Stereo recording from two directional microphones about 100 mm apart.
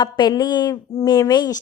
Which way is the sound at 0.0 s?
45° left (ahead or behind).